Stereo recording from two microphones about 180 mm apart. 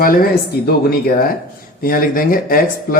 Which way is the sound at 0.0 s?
55° left (ahead or behind).